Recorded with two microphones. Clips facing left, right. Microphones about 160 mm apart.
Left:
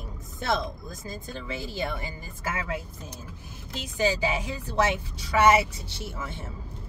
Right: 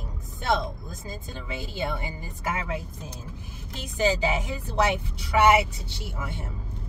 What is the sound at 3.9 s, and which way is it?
A woman's voice, 20° right (ahead or behind).